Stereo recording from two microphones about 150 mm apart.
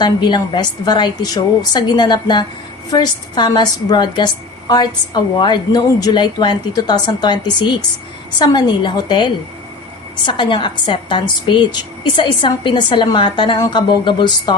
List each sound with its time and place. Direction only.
0.0 s a woman's voice: 30° left (ahead or behind)